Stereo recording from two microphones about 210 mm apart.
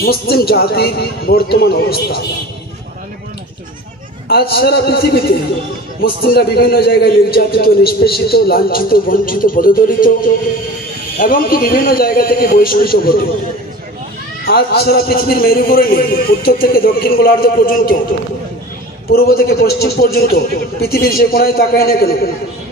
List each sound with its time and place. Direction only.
0.0 s a man's voice: 45° left (ahead or behind)
4.3 s a man's voice: 50° left (ahead or behind)
11.1 s a man's voice: 45° left (ahead or behind)
14.4 s a man's voice: 50° left (ahead or behind)
19.0 s a man's voice: 45° left (ahead or behind)